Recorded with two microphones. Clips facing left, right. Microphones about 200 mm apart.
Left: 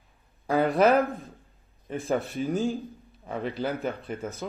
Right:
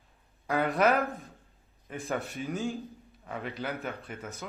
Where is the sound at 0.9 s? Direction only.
Centre (ahead or behind).